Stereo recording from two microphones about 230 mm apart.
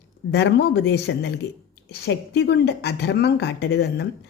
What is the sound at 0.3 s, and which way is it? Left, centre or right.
Speech, left.